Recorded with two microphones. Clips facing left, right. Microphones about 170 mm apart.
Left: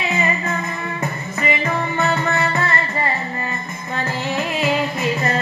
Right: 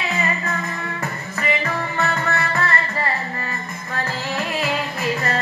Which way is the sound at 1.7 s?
20° left (ahead or behind).